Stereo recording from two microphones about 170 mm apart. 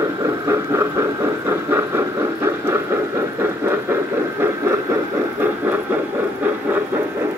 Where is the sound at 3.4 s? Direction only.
15° right (ahead or behind).